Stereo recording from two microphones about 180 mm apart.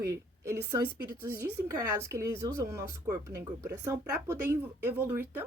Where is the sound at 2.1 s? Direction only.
15° right (ahead or behind).